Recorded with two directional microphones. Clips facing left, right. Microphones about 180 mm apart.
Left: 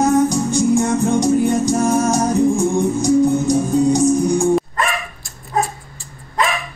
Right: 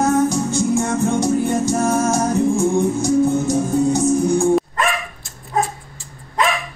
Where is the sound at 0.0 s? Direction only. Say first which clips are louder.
Left 2 dB; 15° left (ahead or behind).